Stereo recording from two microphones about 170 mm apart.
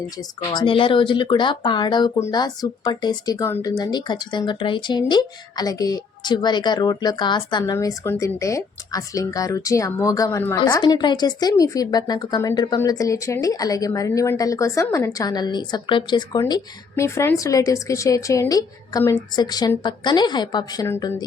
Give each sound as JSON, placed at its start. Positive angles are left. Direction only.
{"t": 0.2, "sound": "speech", "side_deg": 25}